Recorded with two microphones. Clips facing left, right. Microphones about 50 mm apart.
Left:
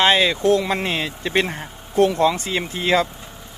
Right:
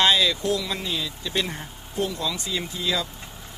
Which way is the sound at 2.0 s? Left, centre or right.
Left.